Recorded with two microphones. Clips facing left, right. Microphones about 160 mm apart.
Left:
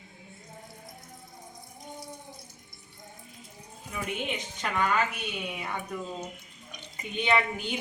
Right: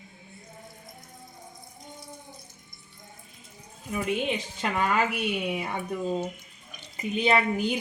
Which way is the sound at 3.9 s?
30° right (ahead or behind).